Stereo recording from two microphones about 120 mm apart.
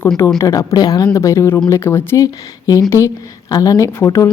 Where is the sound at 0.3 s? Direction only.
30° left (ahead or behind).